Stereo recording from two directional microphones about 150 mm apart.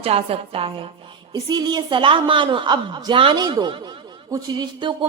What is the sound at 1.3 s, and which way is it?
Speech, 25° right (ahead or behind).